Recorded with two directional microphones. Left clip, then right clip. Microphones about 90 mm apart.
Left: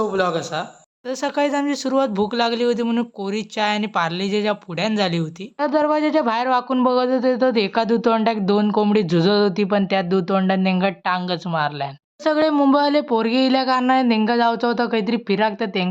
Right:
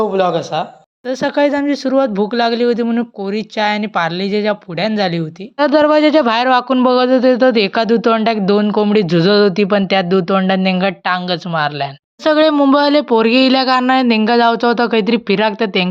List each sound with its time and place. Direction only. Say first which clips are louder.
0.0 s speech: right 6 dB; 20° right (ahead or behind)
1.0 s speech: right 7 dB; 40° right (ahead or behind)
5.5 s speech: right 8 dB; 50° right (ahead or behind); by 7.9 s 30° right (ahead or behind)
7.9 s speech: right 5 dB; 15° right (ahead or behind)
12.2 s speech: right 6 dB; 40° right (ahead or behind)